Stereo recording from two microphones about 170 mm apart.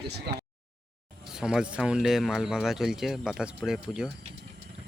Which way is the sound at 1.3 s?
5° right (ahead or behind).